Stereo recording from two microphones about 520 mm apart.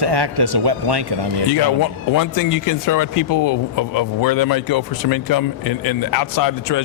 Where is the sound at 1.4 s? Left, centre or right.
Left.